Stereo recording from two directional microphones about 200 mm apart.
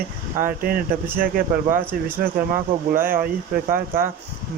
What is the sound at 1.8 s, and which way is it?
Speech, 10° right (ahead or behind).